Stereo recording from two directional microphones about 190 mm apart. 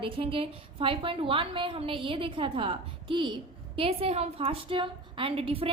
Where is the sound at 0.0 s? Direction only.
30° right (ahead or behind).